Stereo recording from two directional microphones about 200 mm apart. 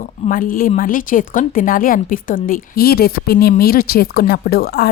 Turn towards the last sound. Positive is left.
turn(degrees=50)  # may be behind; listen again after turning